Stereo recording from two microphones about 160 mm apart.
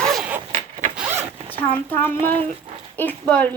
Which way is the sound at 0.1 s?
Centre (ahead or behind).